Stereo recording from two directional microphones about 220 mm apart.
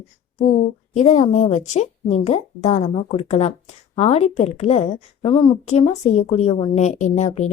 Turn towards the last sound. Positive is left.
turn(degrees=30)  # may be behind; listen again after turning